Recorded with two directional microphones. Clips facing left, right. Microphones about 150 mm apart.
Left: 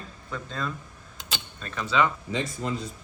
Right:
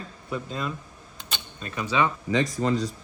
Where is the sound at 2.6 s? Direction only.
90° right.